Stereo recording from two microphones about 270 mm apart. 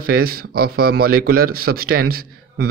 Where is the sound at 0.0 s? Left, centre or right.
Right.